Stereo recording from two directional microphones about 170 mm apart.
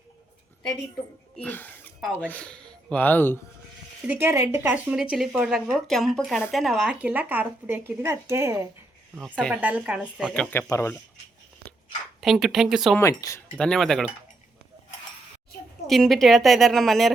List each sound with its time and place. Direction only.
1.4 s speech: 10° left (ahead or behind)
4.0 s a woman's voice: 10° right (ahead or behind)
9.3 s a woman's voice: 5° left (ahead or behind)
9.6 s speech: 10° right (ahead or behind)
10.3 s a woman's voice: 5° left (ahead or behind)
10.7 s speech: 15° left (ahead or behind)
12.2 s a woman's voice: centre (ahead or behind)
13.0 s speech: 15° left (ahead or behind)
13.6 s a woman's voice: 5° left (ahead or behind)
15.9 s a woman's voice: centre (ahead or behind)